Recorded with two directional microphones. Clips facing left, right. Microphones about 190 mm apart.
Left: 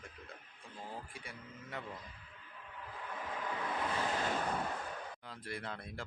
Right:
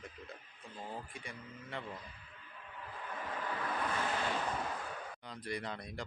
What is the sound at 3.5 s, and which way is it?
Vehicle, 15° left (ahead or behind).